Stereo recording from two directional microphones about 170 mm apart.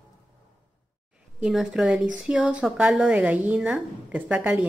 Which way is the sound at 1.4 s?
Centre (ahead or behind).